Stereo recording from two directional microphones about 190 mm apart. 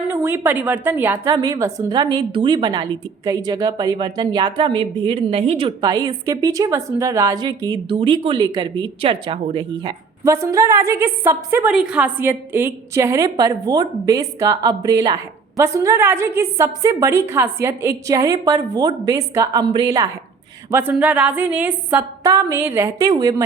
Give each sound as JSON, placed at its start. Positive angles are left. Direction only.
{"t": 0.1, "sound": "a woman's voice", "side_deg": -10}
{"t": 20.7, "sound": "a woman's voice", "side_deg": -10}